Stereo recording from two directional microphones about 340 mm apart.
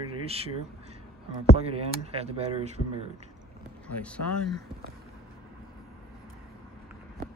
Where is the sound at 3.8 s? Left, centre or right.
Centre.